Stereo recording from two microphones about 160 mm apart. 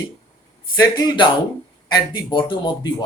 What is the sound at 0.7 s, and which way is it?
Speech, 25° left (ahead or behind).